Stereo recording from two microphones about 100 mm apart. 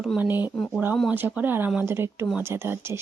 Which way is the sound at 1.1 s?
20° right (ahead or behind).